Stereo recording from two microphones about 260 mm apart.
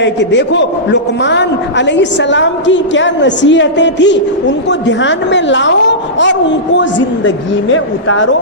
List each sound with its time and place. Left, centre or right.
0.0 s a man's voice: left